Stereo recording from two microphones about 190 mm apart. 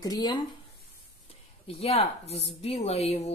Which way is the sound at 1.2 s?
35° left (ahead or behind).